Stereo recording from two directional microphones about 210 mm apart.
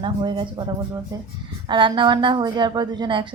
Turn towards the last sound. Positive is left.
turn(degrees=-20)  # may be behind; listen again after turning